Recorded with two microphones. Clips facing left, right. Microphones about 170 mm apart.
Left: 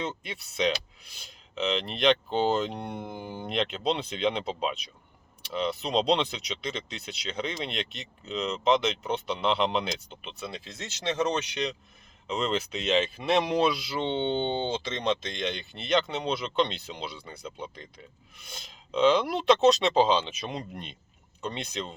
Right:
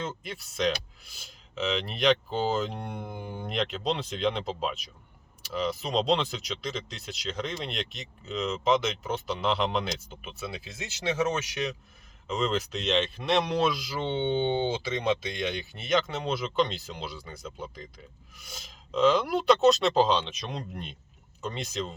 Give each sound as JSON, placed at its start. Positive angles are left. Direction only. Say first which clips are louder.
{"t": 0.0, "sound": "speech", "louder": "left 1 dB", "side_deg": 0}